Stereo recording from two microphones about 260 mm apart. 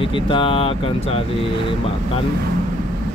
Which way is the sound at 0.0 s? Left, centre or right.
Centre.